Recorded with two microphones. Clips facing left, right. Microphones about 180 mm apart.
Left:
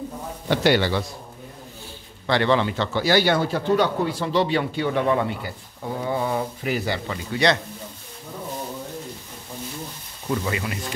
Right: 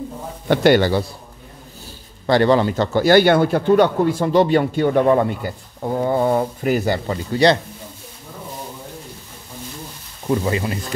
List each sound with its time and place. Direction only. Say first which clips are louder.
0.5 s speech: right 6 dB; 50° right (ahead or behind)
2.2 s speech: right 5 dB; 40° right (ahead or behind)
10.2 s speech: right 6 dB; 30° right (ahead or behind)